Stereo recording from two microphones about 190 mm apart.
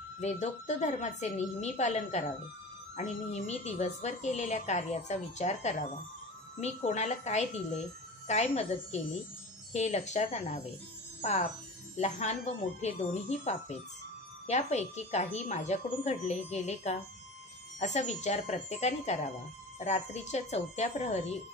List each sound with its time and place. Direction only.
0.2 s a woman's voice: 35° left (ahead or behind)